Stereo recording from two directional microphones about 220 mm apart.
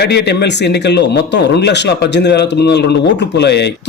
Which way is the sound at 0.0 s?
50° left (ahead or behind).